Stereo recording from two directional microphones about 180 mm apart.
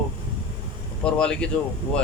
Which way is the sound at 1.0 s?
5° left (ahead or behind).